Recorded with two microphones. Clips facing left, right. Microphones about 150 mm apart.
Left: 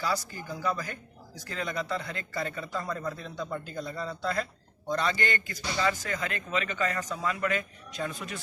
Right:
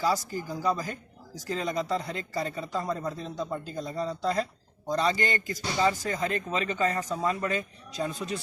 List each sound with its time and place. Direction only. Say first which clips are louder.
0.0 s speech: right 4 dB; 40° right (ahead or behind)
2.9 s speech: right 2 dB; 20° right (ahead or behind)
3.2 s speech: right 2 dB; 35° right (ahead or behind)